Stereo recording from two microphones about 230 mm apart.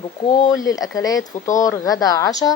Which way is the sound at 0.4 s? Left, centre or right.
Centre.